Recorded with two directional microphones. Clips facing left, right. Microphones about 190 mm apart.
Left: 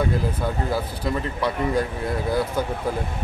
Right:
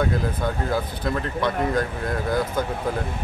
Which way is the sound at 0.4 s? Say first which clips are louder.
Even; 5° left (ahead or behind).